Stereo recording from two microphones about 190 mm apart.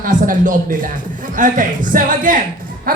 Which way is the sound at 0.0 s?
45° right (ahead or behind).